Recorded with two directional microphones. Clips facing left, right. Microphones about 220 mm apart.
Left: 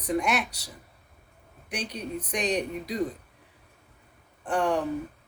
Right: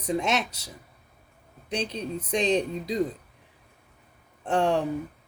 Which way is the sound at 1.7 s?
25° right (ahead or behind).